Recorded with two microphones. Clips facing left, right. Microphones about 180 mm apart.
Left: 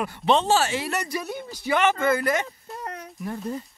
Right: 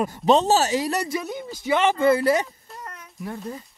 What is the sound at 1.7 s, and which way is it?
Speech, 30° right (ahead or behind).